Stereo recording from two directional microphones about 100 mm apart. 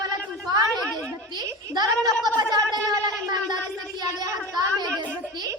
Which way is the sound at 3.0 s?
45° right (ahead or behind).